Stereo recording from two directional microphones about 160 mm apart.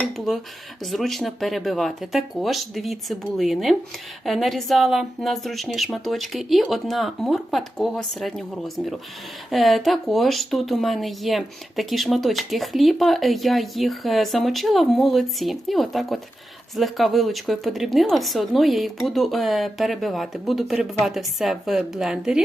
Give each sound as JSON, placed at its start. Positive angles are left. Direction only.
{"t": 0.9, "sound": "speech", "side_deg": 0}